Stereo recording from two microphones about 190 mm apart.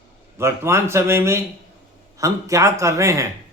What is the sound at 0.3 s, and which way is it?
A man's voice, 15° right (ahead or behind).